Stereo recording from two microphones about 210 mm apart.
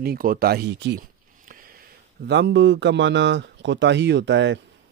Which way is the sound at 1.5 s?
45° right (ahead or behind).